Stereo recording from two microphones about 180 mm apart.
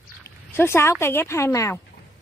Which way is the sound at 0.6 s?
15° left (ahead or behind).